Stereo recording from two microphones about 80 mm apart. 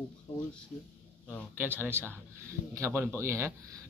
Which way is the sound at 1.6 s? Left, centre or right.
Right.